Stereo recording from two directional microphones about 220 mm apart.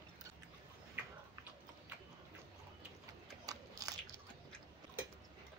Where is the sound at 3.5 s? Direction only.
15° right (ahead or behind).